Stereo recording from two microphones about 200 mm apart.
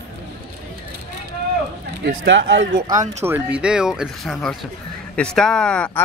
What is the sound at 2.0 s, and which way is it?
Speech, 60° right (ahead or behind).